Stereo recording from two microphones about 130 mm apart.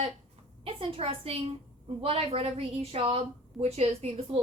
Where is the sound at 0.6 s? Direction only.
50° right (ahead or behind).